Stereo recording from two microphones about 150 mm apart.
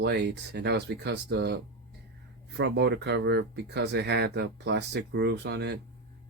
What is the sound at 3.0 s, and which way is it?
Speech, 90° right.